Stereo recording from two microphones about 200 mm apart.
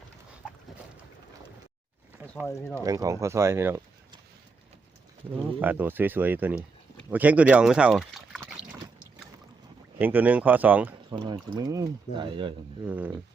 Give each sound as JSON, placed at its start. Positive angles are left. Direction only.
{"t": 2.5, "sound": "speech", "side_deg": 10}
{"t": 2.8, "sound": "speech", "side_deg": -15}
{"t": 5.5, "sound": "speech", "side_deg": -10}
{"t": 10.0, "sound": "speech", "side_deg": -10}
{"t": 11.1, "sound": "speech", "side_deg": -20}
{"t": 12.8, "sound": "speech", "side_deg": -10}